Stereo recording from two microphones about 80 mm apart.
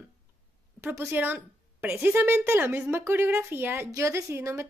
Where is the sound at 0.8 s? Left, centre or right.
Right.